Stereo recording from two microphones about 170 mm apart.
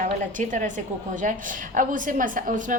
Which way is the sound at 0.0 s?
50° right (ahead or behind).